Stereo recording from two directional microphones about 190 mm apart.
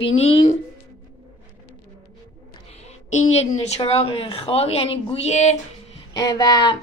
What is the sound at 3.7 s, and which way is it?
A woman's voice, 30° left (ahead or behind).